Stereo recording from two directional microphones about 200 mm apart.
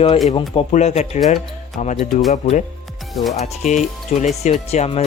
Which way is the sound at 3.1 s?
Centre (ahead or behind).